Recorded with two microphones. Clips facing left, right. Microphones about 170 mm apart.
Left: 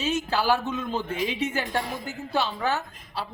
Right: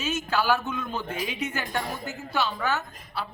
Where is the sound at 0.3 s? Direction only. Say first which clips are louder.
Right 2 dB; 30° left (ahead or behind).